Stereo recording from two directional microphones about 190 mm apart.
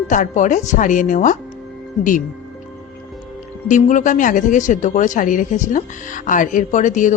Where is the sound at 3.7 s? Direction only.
40° left (ahead or behind).